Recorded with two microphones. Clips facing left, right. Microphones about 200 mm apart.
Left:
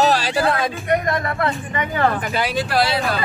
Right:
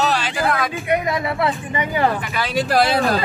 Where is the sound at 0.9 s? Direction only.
5° right (ahead or behind).